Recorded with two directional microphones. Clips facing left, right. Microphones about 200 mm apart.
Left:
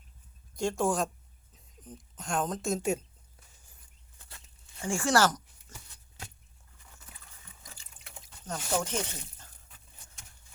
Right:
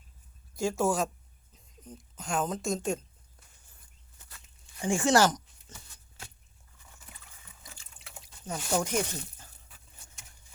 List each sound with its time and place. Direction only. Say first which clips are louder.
0.5 s a woman's voice: right 1 dB; centre (ahead or behind)
4.8 s speech: right 2 dB; 20° right (ahead or behind)
7.6 s drip: right 1 dB; 5° right (ahead or behind)